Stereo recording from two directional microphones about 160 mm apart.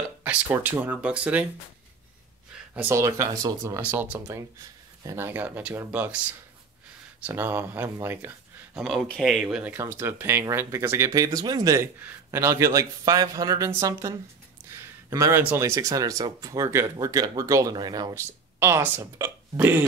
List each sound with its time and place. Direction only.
0.2 s speech: 10° right (ahead or behind)
2.7 s speech: 10° right (ahead or behind)
3.0 s speech: 20° right (ahead or behind)
7.2 s speech: 15° right (ahead or behind)
8.8 s speech: centre (ahead or behind)